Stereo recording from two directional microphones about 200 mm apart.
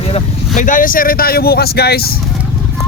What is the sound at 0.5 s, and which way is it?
Speech, 40° left (ahead or behind).